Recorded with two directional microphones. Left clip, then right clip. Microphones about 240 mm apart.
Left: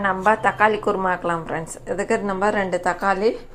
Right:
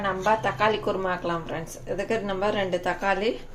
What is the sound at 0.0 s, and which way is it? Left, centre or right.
A woman's voice, centre.